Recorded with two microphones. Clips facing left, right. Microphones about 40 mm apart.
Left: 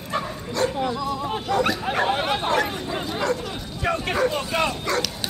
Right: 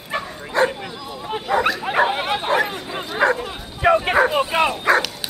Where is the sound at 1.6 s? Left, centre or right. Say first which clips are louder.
Right 4 dB; centre.